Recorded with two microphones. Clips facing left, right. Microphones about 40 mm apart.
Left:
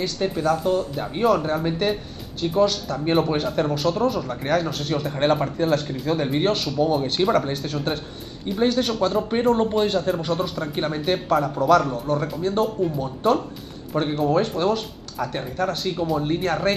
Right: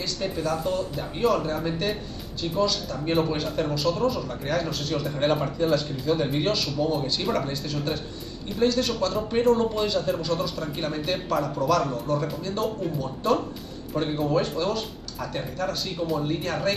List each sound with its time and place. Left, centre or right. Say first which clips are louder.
0.0 s speech: left 5 dB; left